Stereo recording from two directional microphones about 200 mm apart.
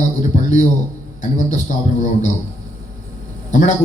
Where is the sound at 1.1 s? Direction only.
40° left (ahead or behind).